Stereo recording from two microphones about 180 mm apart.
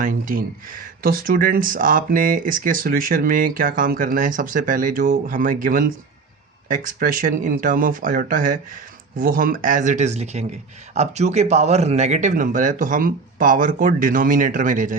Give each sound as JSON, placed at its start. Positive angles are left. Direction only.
{"t": 0.0, "sound": "speech", "side_deg": -50}